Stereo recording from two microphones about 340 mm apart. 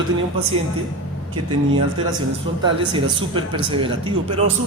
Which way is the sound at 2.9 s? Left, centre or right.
Centre.